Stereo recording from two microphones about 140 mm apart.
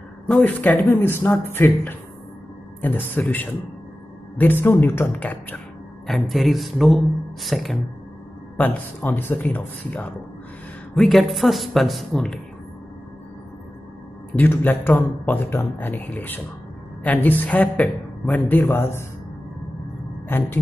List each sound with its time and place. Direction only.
0.3 s a man's voice: 10° left (ahead or behind)
6.0 s a woman's voice: centre (ahead or behind)
8.5 s a man's voice: 10° left (ahead or behind)
11.0 s a woman's voice: centre (ahead or behind)
14.3 s a man's voice: 15° left (ahead or behind)
20.2 s a man's voice: 15° left (ahead or behind)